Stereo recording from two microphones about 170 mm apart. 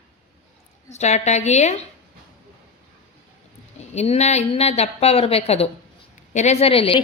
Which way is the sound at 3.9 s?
40° left (ahead or behind).